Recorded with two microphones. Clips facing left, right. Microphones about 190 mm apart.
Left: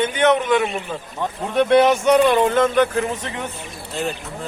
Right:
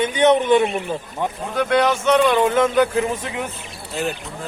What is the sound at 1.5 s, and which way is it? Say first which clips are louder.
Speech: left 4 dB; 25° left (ahead or behind).